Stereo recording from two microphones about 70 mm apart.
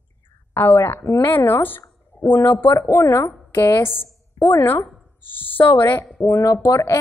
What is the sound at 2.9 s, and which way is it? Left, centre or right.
A woman's voice, left.